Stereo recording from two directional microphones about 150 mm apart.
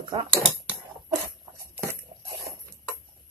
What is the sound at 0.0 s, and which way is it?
Speech, 30° right (ahead or behind).